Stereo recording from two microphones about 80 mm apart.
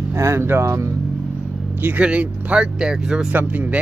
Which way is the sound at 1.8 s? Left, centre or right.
Centre.